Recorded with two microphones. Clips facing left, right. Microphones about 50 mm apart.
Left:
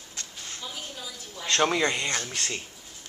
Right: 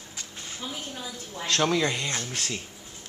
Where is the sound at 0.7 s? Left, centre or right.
Right.